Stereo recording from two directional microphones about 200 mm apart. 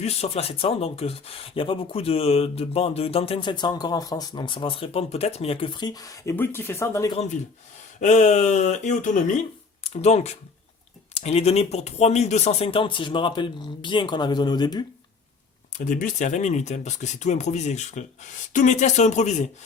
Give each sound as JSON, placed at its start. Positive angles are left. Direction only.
{"t": 0.0, "sound": "speech", "side_deg": 30}
{"t": 8.0, "sound": "speech", "side_deg": 35}
{"t": 15.8, "sound": "speech", "side_deg": 40}